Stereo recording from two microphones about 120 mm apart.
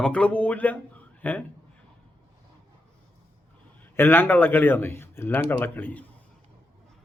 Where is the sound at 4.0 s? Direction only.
15° left (ahead or behind).